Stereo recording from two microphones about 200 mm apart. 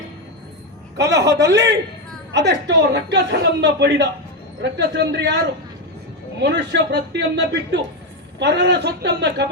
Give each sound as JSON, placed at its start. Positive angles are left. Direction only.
{"t": 1.1, "sound": "a man's voice", "side_deg": -60}